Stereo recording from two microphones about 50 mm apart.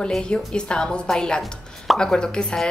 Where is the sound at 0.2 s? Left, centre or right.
Centre.